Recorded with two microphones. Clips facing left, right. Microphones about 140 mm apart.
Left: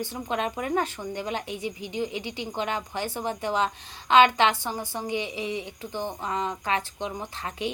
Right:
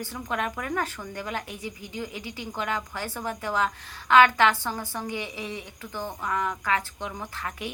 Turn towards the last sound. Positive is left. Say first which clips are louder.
# left 2 dB
turn(degrees=20)  # may be behind; listen again after turning